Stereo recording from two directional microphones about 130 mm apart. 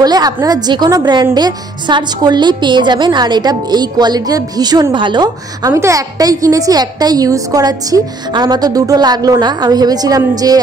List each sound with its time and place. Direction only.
0.0 s a woman's voice: 30° right (ahead or behind)
5.7 s a woman's voice: 20° right (ahead or behind)